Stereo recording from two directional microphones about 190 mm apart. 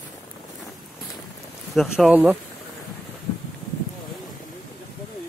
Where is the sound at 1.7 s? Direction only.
5° right (ahead or behind).